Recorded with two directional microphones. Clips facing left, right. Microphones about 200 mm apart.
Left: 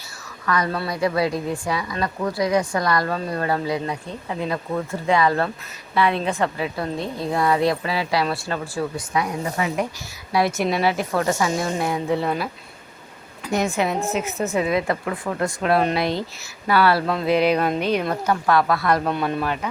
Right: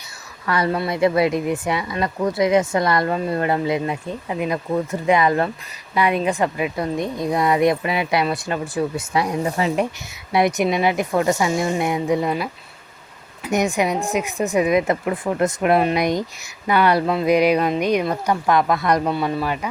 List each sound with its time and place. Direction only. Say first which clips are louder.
0.4 s a woman's voice: right 3 dB; 30° right (ahead or behind)
9.1 s a woman's voice: right 3 dB; 30° right (ahead or behind); by 12.4 s 15° right (ahead or behind)
13.5 s a woman's voice: right 2 dB; 15° right (ahead or behind)
19.1 s a woman's voice: right 1 dB; 5° right (ahead or behind)